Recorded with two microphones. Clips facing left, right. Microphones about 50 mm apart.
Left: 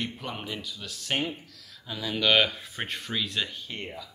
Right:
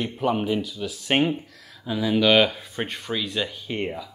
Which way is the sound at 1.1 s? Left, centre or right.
Right.